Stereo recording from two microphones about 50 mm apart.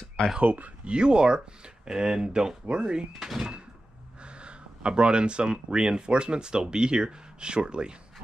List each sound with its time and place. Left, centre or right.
0.4 s speech: right
0.9 s speech: centre
3.1 s speech: centre
4.2 s speech: right